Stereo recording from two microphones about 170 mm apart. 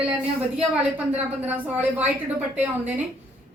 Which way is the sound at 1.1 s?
10° right (ahead or behind).